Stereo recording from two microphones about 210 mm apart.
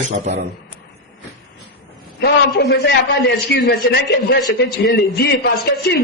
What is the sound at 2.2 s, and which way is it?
A man's voice, 50° left (ahead or behind).